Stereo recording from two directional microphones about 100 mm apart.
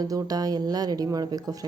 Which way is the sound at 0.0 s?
40° right (ahead or behind).